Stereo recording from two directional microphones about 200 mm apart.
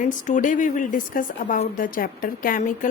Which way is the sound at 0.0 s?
40° left (ahead or behind).